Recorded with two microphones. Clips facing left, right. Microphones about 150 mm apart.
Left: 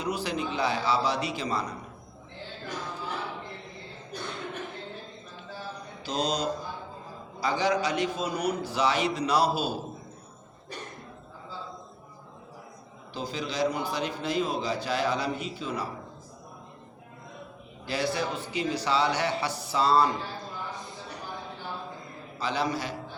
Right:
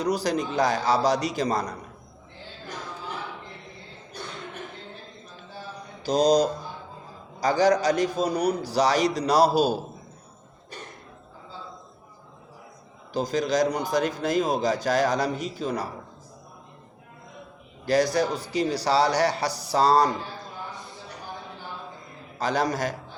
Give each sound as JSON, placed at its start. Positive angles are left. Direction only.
{"t": 0.0, "sound": "a man's voice", "side_deg": -40}
{"t": 6.0, "sound": "a man's voice", "side_deg": -40}
{"t": 13.1, "sound": "a man's voice", "side_deg": -45}
{"t": 17.8, "sound": "a man's voice", "side_deg": -40}
{"t": 22.4, "sound": "a man's voice", "side_deg": -45}